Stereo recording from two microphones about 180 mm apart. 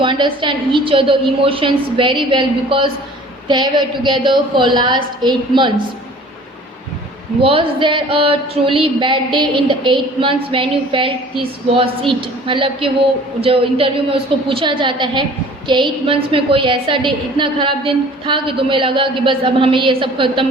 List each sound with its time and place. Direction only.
0.0 s a woman's voice: 25° right (ahead or behind)
7.4 s a woman's voice: 30° right (ahead or behind)